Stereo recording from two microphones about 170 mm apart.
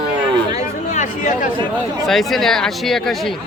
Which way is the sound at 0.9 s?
50° left (ahead or behind).